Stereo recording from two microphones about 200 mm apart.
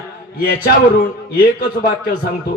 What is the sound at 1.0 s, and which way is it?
Speech, 50° left (ahead or behind).